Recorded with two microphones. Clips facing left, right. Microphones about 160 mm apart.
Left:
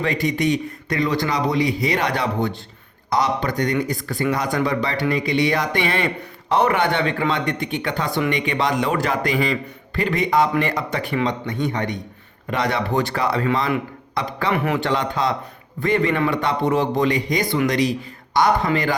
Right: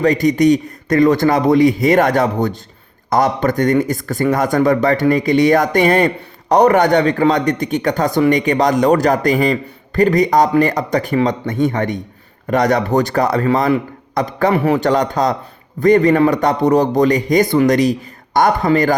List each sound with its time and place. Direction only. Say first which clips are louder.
0.0 s speech: right 8 dB; 40° right (ahead or behind)